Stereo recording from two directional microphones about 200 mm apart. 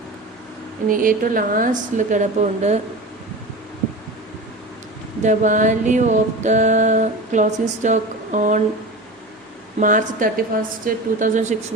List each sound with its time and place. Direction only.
0.9 s a woman's voice: 45° right (ahead or behind)
5.2 s female singing: 40° right (ahead or behind)
9.8 s female singing: 40° right (ahead or behind)